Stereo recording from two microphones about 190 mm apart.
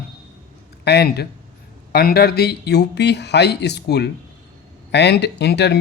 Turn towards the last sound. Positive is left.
turn(degrees=60)  # may be behind; listen again after turning